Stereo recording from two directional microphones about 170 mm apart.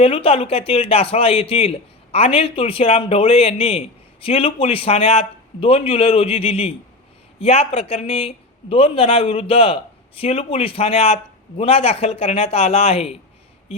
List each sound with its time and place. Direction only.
0.0 s speech: 35° left (ahead or behind)